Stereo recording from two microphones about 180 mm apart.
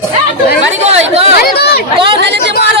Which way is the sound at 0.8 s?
35° right (ahead or behind).